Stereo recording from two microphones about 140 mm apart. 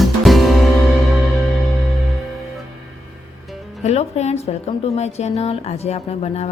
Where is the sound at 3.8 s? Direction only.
50° left (ahead or behind).